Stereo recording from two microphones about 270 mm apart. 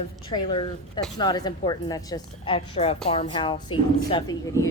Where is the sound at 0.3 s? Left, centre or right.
Centre.